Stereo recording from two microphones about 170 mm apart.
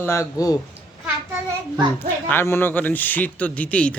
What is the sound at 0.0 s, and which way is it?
Speech, 15° left (ahead or behind).